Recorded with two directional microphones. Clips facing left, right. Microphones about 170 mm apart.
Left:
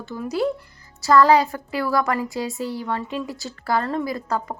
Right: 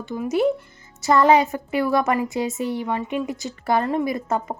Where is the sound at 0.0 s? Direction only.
20° right (ahead or behind).